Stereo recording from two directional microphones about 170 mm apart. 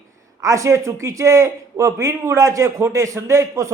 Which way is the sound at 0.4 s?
20° right (ahead or behind).